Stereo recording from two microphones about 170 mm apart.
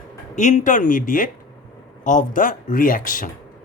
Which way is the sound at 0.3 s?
45° left (ahead or behind).